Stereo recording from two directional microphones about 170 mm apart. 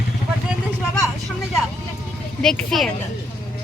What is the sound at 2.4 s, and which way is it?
Speech, centre (ahead or behind).